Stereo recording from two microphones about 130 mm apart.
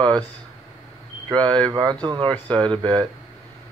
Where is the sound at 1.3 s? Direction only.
35° right (ahead or behind).